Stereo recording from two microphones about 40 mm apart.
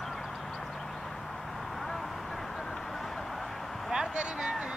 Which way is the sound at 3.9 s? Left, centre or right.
Centre.